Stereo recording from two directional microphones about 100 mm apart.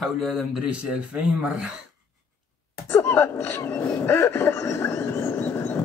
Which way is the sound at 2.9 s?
25° left (ahead or behind).